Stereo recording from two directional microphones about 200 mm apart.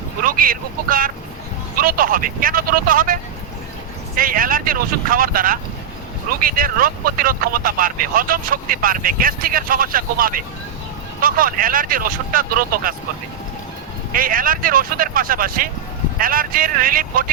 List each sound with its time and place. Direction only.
0.2 s speech: 45° right (ahead or behind)
14.1 s speech: 45° right (ahead or behind)